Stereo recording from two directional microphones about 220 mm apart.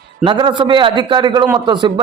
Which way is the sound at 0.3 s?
20° right (ahead or behind).